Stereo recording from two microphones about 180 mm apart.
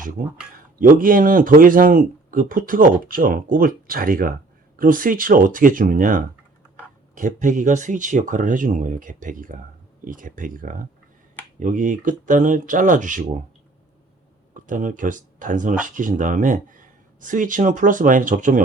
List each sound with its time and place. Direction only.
0.8 s speech: 50° right (ahead or behind)
14.5 s speech: 45° right (ahead or behind)